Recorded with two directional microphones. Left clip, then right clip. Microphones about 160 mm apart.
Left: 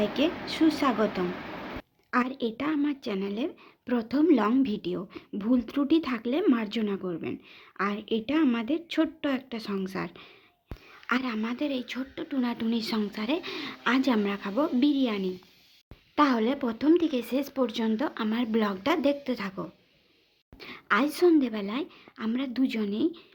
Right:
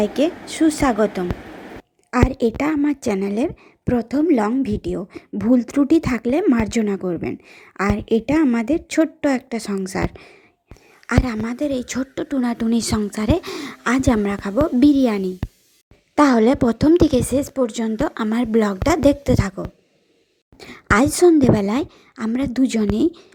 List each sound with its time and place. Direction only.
0.0 s a woman's voice: 40° right (ahead or behind)
14.8 s a woman's voice: 50° right (ahead or behind)